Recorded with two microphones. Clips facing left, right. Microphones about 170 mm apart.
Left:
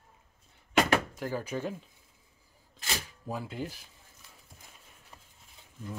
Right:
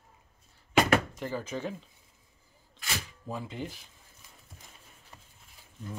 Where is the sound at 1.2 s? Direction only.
10° left (ahead or behind).